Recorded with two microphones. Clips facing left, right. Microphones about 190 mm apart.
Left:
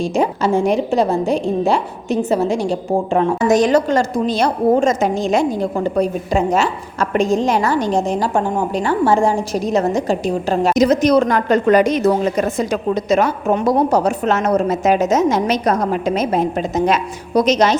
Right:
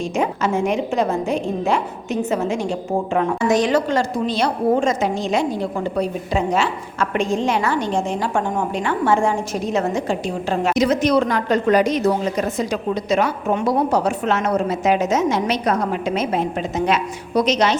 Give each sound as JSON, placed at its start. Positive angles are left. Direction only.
{"t": 0.0, "sound": "a woman's voice", "side_deg": 35}